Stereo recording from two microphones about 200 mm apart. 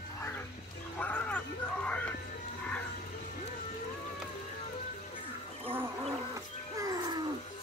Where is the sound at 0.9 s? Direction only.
5° left (ahead or behind).